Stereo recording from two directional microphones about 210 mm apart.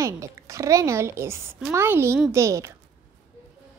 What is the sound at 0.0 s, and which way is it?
A woman's voice, 15° right (ahead or behind).